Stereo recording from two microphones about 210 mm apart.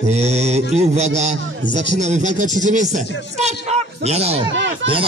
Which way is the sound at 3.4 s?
30° right (ahead or behind).